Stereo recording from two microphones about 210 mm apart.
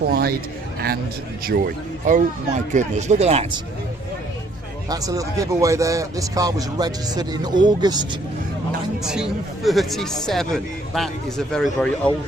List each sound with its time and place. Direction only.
0.1 s speech: 45° right (ahead or behind)
1.5 s speech: 45° right (ahead or behind)
4.9 s speech: 15° right (ahead or behind)
9.6 s speech: centre (ahead or behind)